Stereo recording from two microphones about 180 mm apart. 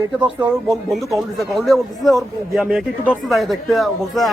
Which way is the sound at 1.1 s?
Centre (ahead or behind).